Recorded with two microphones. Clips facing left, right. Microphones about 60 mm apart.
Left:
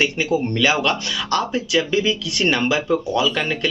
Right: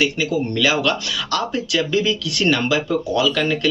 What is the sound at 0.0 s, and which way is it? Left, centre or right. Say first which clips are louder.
Speech: even; left.